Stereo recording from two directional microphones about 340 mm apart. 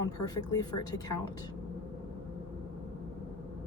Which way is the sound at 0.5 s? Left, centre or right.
Centre.